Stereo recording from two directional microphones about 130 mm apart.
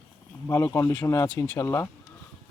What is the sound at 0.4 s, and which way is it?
Speech, 20° left (ahead or behind).